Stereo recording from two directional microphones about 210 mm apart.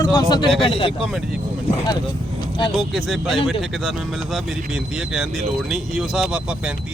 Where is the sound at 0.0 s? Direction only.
20° left (ahead or behind).